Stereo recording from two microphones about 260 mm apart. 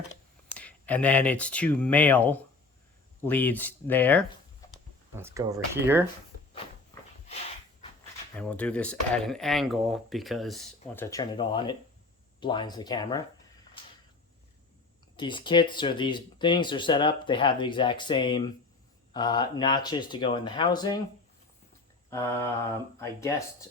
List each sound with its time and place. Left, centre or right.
0.5 s speech: centre
5.1 s speech: centre
8.4 s speech: centre
15.1 s speech: centre
23.0 s speech: centre